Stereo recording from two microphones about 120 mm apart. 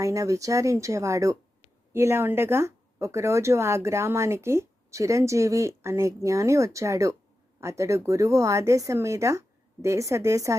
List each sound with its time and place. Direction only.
0.0 s speech: 25° right (ahead or behind)